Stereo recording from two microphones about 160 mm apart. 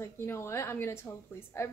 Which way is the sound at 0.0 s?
15° left (ahead or behind).